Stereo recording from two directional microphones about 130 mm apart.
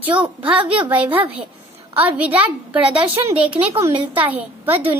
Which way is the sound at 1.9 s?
10° right (ahead or behind).